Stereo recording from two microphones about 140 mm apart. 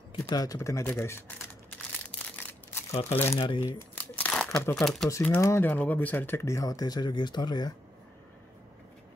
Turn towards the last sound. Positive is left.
turn(degrees=30)  # may be behind; listen again after turning